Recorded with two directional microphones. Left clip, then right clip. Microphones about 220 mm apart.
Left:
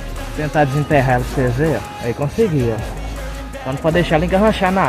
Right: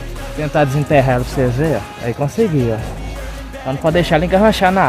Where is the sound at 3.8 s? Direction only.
50° right (ahead or behind).